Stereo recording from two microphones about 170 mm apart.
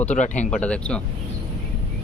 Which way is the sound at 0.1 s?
45° left (ahead or behind).